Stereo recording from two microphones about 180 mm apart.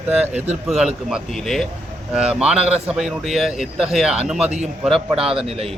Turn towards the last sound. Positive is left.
turn(degrees=-35)  # may be behind; listen again after turning